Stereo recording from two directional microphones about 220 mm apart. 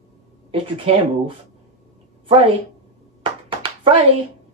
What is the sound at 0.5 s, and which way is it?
A woman's voice, 25° right (ahead or behind).